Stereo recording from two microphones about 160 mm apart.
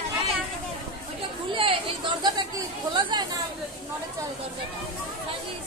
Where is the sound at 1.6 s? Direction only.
35° right (ahead or behind).